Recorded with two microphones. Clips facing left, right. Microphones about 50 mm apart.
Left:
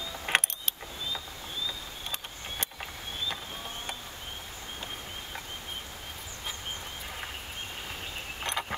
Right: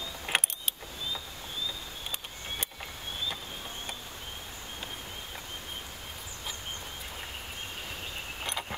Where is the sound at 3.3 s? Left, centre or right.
Left.